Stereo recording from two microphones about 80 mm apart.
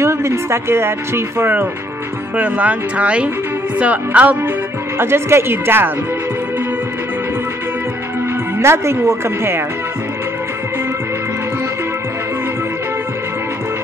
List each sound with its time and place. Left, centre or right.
0.0 s speech: right; by 4.4 s centre
4.9 s speech: right
8.5 s speech: right